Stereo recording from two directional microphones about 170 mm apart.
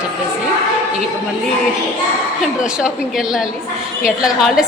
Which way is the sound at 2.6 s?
5° right (ahead or behind).